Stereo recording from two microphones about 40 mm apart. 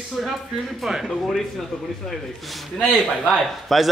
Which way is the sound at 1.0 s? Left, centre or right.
Centre.